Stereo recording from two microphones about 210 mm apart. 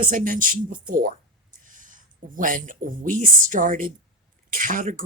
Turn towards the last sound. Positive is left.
turn(degrees=-40)  # may be behind; listen again after turning